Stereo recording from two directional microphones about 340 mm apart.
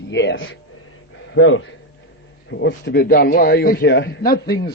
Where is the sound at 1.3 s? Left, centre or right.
Left.